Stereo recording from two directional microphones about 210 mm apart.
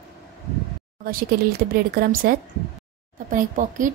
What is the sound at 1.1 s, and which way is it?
Speech, 45° right (ahead or behind).